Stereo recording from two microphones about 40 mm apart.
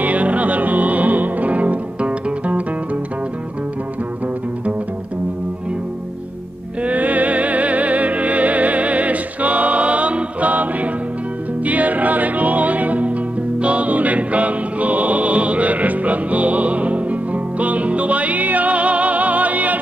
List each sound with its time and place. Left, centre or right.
0.0 s music: right
6.8 s music: right